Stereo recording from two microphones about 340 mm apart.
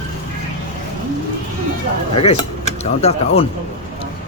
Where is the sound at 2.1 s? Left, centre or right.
Centre.